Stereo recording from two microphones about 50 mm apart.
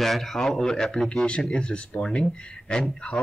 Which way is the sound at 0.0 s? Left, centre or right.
Centre.